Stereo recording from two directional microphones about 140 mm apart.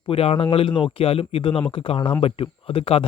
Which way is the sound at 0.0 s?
40° left (ahead or behind).